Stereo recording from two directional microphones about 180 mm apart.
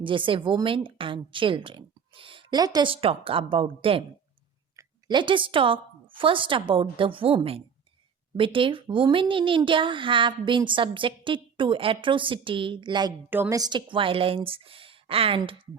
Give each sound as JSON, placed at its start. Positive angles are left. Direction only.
{"t": 0.0, "sound": "speech", "side_deg": -30}